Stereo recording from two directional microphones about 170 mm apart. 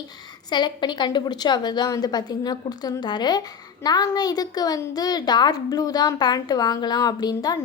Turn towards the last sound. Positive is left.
turn(degrees=25)  # may be behind; listen again after turning